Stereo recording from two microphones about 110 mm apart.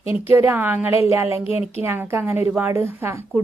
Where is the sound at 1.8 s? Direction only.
20° right (ahead or behind).